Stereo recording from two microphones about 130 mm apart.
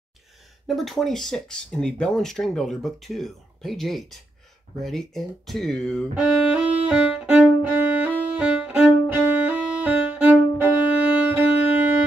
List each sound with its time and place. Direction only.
0.7 s speech: centre (ahead or behind)
6.2 s violin: 5° right (ahead or behind)